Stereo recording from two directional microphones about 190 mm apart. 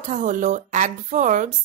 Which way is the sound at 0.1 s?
40° right (ahead or behind).